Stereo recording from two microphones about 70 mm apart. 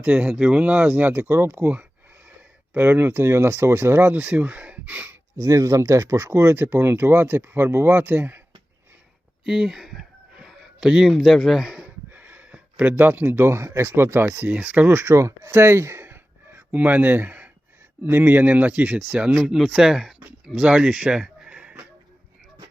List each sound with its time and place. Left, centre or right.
0.0 s speech: right
4.2 s speech: right
5.4 s speech: right
9.5 s a sound: centre
11.1 s speech: centre
12.1 s gasp: right
12.8 s speech: right
14.4 s speech: right
15.0 s speech: right; by 21.8 s centre